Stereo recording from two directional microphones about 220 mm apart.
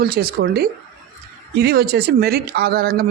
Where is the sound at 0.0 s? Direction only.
45° right (ahead or behind).